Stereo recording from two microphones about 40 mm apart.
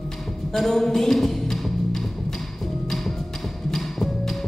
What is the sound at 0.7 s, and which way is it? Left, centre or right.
Music, centre.